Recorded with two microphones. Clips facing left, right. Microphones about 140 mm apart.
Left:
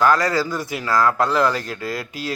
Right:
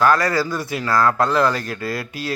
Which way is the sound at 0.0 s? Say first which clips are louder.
Even; 15° left (ahead or behind).